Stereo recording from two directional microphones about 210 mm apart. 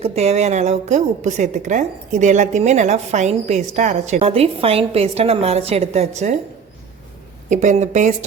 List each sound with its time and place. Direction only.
0.0 s a woman's voice: 30° right (ahead or behind)
7.5 s a woman's voice: 35° right (ahead or behind)